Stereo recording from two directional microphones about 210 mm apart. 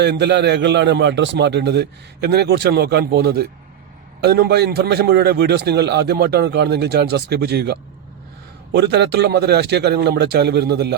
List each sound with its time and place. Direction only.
0.0 s a man's voice: 55° right (ahead or behind)